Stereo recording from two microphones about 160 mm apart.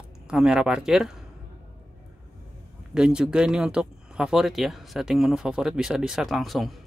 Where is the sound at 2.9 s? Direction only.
5° right (ahead or behind).